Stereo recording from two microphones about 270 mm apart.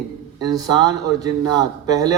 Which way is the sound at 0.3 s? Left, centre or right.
Centre.